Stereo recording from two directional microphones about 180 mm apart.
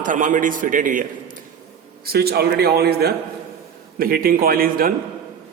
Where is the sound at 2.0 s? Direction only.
60° right (ahead or behind).